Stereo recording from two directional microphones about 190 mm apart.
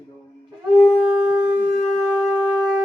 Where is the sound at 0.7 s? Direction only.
10° left (ahead or behind).